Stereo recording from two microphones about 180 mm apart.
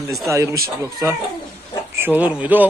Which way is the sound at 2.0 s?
10° right (ahead or behind).